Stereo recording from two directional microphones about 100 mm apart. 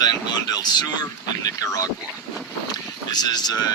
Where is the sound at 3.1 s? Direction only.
45° left (ahead or behind).